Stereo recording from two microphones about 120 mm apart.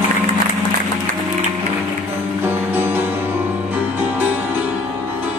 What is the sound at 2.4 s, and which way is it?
Music, 15° right (ahead or behind).